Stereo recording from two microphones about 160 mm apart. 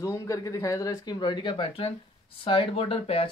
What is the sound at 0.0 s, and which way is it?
Speech, 20° left (ahead or behind).